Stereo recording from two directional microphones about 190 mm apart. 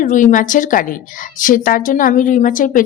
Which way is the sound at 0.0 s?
40° left (ahead or behind).